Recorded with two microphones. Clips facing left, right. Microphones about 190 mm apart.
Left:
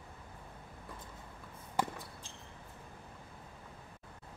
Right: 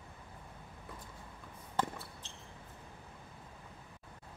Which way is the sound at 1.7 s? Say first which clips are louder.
Left 1 dB; 10° left (ahead or behind).